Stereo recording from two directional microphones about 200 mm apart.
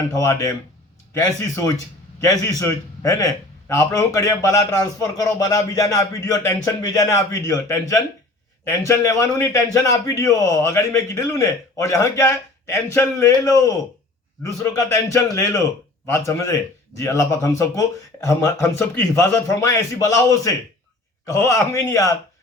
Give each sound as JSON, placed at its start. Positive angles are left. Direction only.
{"t": 0.3, "sound": "a man's voice", "side_deg": 15}